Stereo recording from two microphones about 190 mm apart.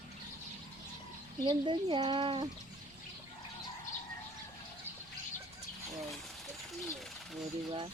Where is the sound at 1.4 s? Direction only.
25° right (ahead or behind).